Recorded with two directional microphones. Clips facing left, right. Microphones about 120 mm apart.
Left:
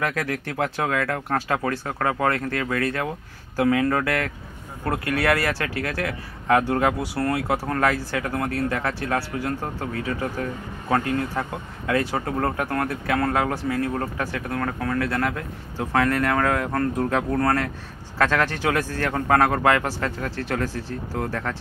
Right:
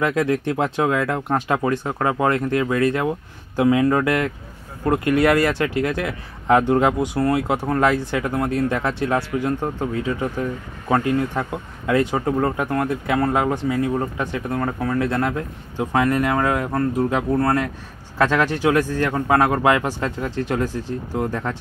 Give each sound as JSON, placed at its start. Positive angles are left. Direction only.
{"t": 0.0, "sound": "speech", "side_deg": -25}